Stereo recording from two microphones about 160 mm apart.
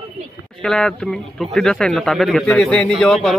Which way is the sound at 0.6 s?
5° left (ahead or behind).